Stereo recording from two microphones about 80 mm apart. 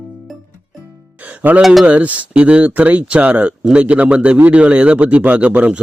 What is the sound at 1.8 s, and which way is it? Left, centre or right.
Speech, centre.